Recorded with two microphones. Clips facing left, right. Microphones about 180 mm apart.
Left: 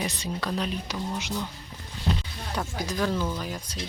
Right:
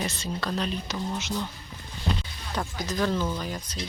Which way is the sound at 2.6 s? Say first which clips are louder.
Right 1 dB; 10° left (ahead or behind).